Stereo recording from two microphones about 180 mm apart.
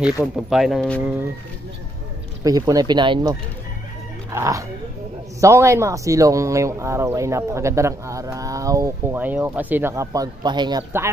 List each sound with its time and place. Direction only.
0.0 s speech: 5° right (ahead or behind)
2.4 s speech: 20° right (ahead or behind)